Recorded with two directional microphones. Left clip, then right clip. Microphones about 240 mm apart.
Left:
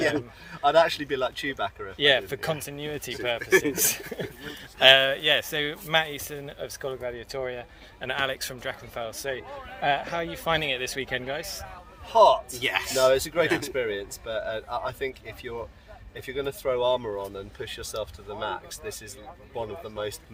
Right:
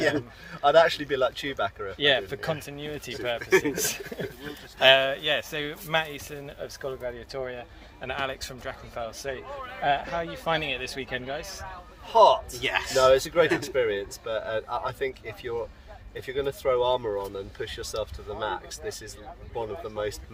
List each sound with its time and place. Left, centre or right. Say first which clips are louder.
0.0 s speech: even; centre
2.0 s speech: left 2 dB; left
3.4 s speech: left 1 dB; centre
3.8 s speech: left 2 dB; left
12.1 s speech: even; centre
12.5 s speech: right 1 dB; centre
13.1 s speech: right 3 dB; centre